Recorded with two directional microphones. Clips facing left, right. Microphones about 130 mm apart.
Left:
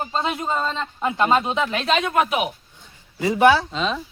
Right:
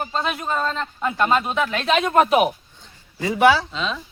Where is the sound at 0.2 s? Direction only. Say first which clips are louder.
Even; 20° left (ahead or behind).